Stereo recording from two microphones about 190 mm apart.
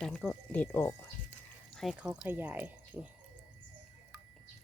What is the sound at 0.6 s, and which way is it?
Speech, 10° left (ahead or behind).